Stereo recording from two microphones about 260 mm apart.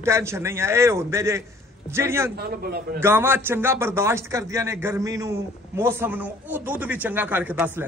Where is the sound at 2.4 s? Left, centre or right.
Right.